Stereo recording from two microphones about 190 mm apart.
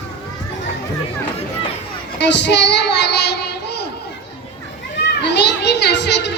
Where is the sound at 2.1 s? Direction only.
65° left (ahead or behind).